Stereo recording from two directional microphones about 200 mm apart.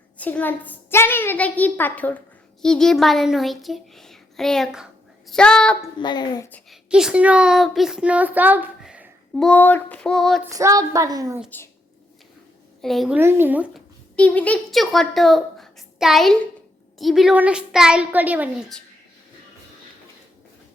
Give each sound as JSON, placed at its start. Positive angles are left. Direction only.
{"t": 0.2, "sound": "a woman's voice", "side_deg": 10}
{"t": 6.0, "sound": "a woman's voice", "side_deg": 20}
{"t": 6.5, "sound": "speech", "side_deg": 0}
{"t": 9.3, "sound": "speech", "side_deg": 5}
{"t": 10.5, "sound": "a woman's voice", "side_deg": -15}
{"t": 12.8, "sound": "speech", "side_deg": 0}
{"t": 13.1, "sound": "a woman's voice", "side_deg": -10}
{"t": 14.2, "sound": "a woman's voice", "side_deg": 5}